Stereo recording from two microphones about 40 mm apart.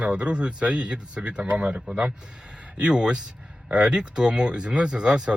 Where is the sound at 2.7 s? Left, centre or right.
Right.